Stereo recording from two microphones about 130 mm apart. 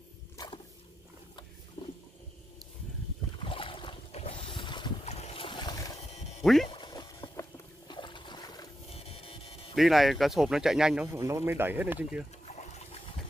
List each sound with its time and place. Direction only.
1.8 s a sound: 20° left (ahead or behind)
3.3 s boat: 40° left (ahead or behind)
5.0 s boat: 55° left (ahead or behind)
5.6 s boat: 30° left (ahead or behind)
6.7 s a sound: 35° left (ahead or behind)
7.9 s trickle: 40° left (ahead or behind)
8.9 s a sound: 50° left (ahead or behind)
9.8 s speech: centre (ahead or behind)
11.1 s speech: 20° right (ahead or behind)
12.4 s trickle: 60° left (ahead or behind)